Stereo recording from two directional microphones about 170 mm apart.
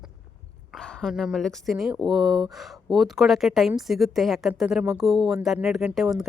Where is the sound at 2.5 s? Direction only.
Centre (ahead or behind).